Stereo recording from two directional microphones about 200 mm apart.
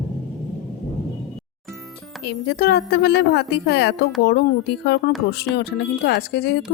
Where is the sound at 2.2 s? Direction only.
55° left (ahead or behind).